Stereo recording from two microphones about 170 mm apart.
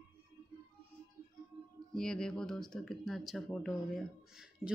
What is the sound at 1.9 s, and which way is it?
Speech, 5° left (ahead or behind).